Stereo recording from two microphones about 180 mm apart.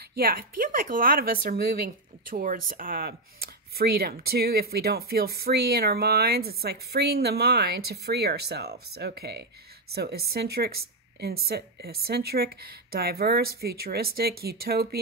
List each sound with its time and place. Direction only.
0.2 s speech: 55° right (ahead or behind)